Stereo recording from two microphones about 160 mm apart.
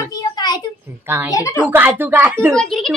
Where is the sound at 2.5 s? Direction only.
5° left (ahead or behind).